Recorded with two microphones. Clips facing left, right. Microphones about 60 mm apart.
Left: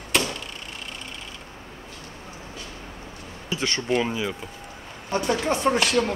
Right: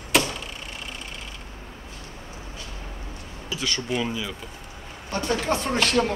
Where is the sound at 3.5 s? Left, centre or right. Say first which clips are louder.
Left 3 dB; left.